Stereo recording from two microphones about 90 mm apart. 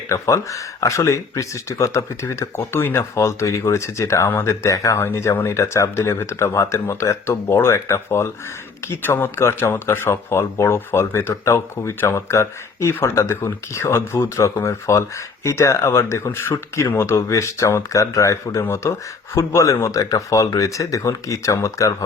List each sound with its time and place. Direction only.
0.1 s speech: 35° left (ahead or behind)